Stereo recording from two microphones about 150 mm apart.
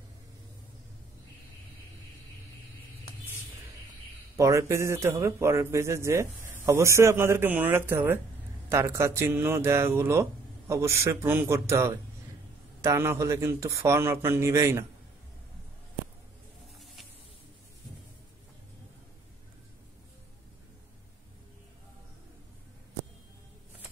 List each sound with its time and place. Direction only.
4.4 s a man's voice: 20° right (ahead or behind)